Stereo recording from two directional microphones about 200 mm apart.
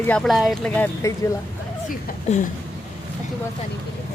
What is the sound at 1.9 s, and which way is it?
Speech, 40° left (ahead or behind).